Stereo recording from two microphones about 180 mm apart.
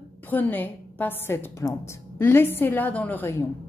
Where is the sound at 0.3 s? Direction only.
10° left (ahead or behind).